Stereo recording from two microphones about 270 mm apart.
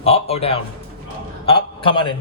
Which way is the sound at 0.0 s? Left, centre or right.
Left.